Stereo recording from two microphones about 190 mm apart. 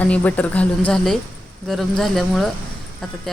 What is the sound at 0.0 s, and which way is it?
A woman's voice, 10° left (ahead or behind).